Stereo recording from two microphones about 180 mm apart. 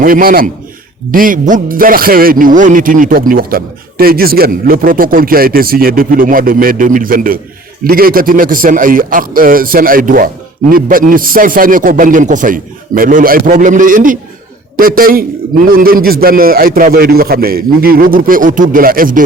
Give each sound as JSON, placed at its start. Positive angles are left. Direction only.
{"t": 0.0, "sound": "a man's voice", "side_deg": -50}